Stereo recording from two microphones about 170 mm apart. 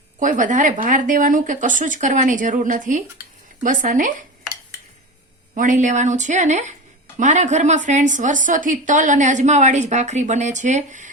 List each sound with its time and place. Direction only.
0.2 s a woman's voice: 50° right (ahead or behind)
5.5 s a woman's voice: 45° right (ahead or behind)